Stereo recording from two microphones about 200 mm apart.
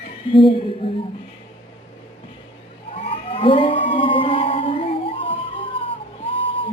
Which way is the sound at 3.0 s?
25° left (ahead or behind).